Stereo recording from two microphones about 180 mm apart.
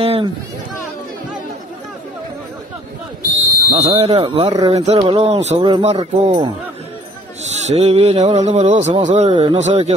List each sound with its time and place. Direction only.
0.0 s a sound: 30° right (ahead or behind)
3.7 s speech: 35° right (ahead or behind)
7.5 s speech: 35° right (ahead or behind)